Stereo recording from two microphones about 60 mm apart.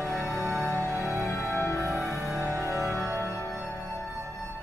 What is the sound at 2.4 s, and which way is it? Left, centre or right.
Music, right.